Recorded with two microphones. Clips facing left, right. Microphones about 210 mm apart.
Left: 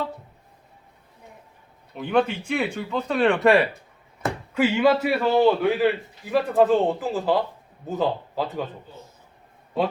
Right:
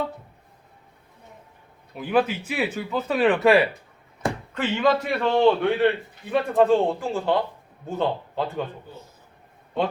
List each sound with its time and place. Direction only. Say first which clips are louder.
2.0 s speech: even; 5° right (ahead or behind)